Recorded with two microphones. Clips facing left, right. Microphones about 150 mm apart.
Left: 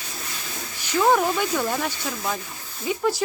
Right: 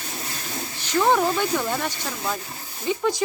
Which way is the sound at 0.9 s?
5° left (ahead or behind).